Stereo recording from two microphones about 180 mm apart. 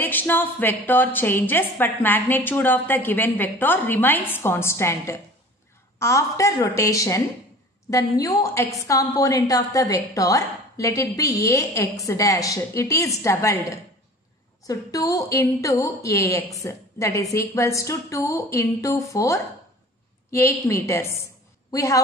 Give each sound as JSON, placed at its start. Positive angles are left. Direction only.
{"t": 0.0, "sound": "a woman's voice", "side_deg": 10}